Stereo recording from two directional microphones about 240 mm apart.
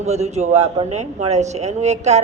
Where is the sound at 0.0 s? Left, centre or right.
Right.